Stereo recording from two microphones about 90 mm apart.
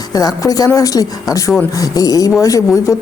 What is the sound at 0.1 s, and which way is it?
Speech, 45° left (ahead or behind).